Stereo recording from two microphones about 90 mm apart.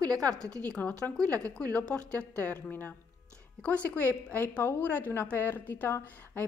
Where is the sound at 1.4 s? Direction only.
40° right (ahead or behind).